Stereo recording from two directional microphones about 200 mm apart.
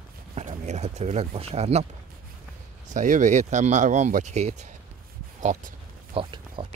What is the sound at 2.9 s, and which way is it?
Speech, 40° right (ahead or behind).